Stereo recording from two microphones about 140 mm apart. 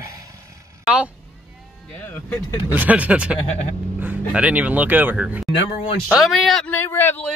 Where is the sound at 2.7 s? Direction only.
15° right (ahead or behind).